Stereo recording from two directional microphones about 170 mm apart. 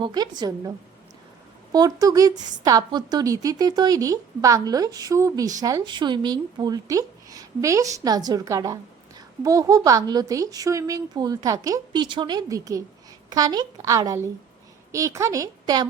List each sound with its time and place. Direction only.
0.0 s speech: 25° right (ahead or behind)
1.7 s speech: 20° right (ahead or behind)